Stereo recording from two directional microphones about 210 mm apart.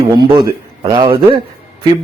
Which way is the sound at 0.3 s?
20° right (ahead or behind).